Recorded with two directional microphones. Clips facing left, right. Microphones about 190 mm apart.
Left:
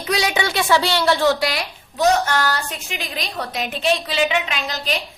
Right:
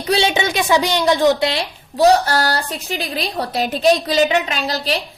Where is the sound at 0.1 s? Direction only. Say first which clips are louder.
Right 4 dB; 25° right (ahead or behind).